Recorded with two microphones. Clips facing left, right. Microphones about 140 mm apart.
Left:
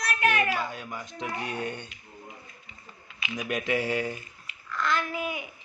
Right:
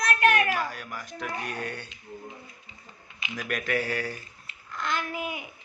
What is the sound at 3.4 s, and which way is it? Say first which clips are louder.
Speech: left 1 dB; 20° left (ahead or behind).